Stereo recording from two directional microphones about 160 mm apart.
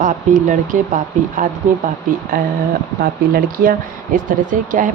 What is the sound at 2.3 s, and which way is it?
Speech, 60° right (ahead or behind).